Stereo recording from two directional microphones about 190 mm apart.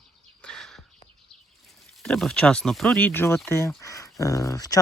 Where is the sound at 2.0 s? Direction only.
Centre (ahead or behind); by 4.8 s 20° left (ahead or behind).